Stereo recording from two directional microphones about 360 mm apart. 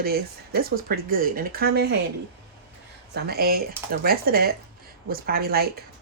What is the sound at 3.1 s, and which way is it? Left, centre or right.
Speech, right.